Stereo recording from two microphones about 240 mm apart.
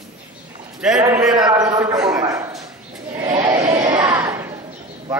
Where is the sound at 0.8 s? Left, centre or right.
Centre.